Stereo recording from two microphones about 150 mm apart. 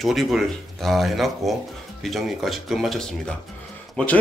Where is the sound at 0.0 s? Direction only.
Centre (ahead or behind).